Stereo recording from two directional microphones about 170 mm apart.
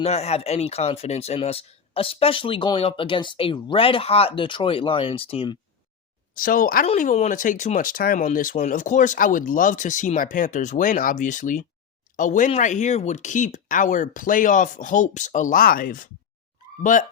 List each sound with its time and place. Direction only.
0.0 s speech: 40° left (ahead or behind)
6.3 s speech: 55° left (ahead or behind)
6.8 s speech: 40° left (ahead or behind)